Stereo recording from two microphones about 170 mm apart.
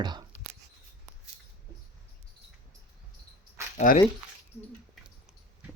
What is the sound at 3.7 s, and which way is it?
Speech, 50° left (ahead or behind).